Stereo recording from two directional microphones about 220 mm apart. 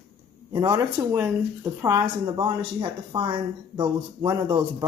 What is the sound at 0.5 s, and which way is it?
Speech, 15° right (ahead or behind).